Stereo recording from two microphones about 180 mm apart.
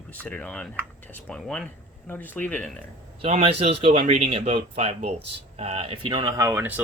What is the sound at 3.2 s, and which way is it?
Speech, 35° right (ahead or behind).